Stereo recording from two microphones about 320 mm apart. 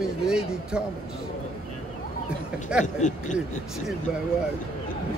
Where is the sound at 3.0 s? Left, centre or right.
Left.